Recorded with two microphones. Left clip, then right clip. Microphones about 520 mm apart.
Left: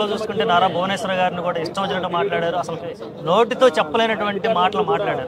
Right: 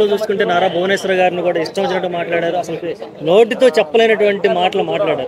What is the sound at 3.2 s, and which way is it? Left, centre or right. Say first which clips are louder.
Speech: right 5 dB; left.